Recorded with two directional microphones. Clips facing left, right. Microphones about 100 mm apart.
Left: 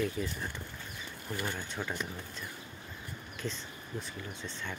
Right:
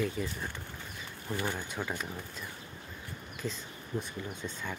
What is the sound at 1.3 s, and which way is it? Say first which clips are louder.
Speech: right 2 dB; 15° right (ahead or behind).